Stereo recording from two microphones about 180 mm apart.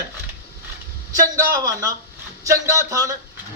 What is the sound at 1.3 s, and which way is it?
A man's voice, 20° right (ahead or behind).